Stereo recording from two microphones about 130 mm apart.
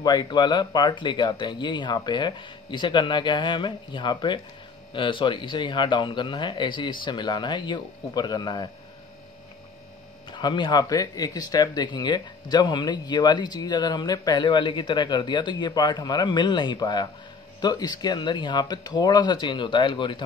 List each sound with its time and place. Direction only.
0.0 s speech: 30° left (ahead or behind)
10.3 s speech: 35° left (ahead or behind)